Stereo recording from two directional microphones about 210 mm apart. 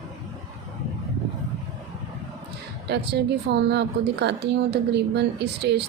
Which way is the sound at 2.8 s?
50° right (ahead or behind).